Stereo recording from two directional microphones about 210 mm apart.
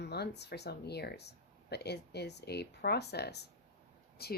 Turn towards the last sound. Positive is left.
turn(degrees=50)  # may be behind; listen again after turning